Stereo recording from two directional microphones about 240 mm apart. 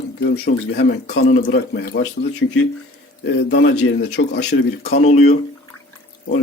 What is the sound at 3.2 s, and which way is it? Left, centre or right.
A man's voice, left.